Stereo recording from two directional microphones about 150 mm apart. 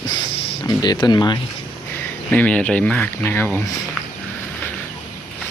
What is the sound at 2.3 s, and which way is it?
Speech, 10° left (ahead or behind).